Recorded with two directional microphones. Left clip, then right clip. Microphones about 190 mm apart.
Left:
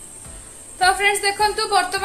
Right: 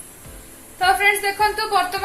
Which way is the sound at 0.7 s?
20° left (ahead or behind).